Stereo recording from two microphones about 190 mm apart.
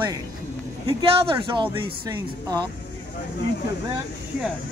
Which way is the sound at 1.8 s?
20° right (ahead or behind).